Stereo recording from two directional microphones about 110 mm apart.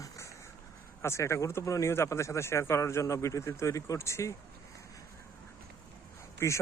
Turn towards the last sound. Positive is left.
turn(degrees=25)  # may be behind; listen again after turning